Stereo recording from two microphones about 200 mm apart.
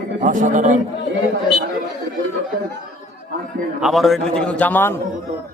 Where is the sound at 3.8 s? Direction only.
Centre (ahead or behind).